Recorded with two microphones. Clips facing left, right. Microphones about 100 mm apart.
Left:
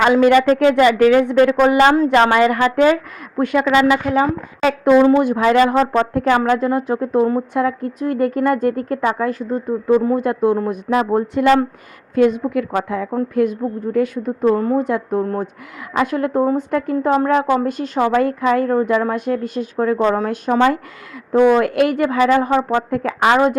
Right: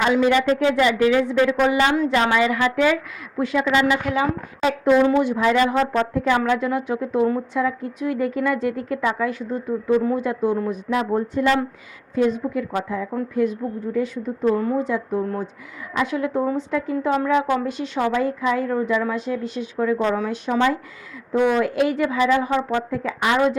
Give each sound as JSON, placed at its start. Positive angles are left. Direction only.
{"t": 0.0, "sound": "a woman's voice", "side_deg": 55}
{"t": 2.0, "sound": "a woman's voice", "side_deg": 65}
{"t": 4.0, "sound": "speech", "side_deg": 45}
{"t": 4.6, "sound": "a woman's voice", "side_deg": 60}
{"t": 6.4, "sound": "speech", "side_deg": 40}
{"t": 7.5, "sound": "speech", "side_deg": 55}
{"t": 11.0, "sound": "a woman's voice", "side_deg": 70}
{"t": 13.3, "sound": "a woman's voice", "side_deg": 55}